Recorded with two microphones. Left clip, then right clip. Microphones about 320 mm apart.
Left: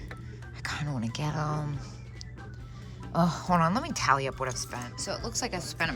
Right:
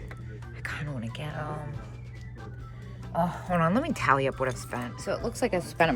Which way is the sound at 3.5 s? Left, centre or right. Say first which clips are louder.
Even; centre.